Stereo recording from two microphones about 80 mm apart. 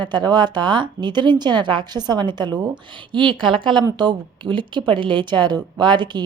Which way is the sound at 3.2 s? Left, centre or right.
Right.